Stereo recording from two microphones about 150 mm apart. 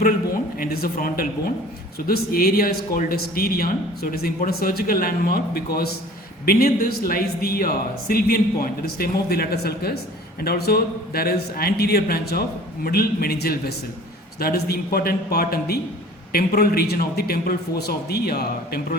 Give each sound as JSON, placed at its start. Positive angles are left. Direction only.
{"t": 0.6, "sound": "a man's voice", "side_deg": 80}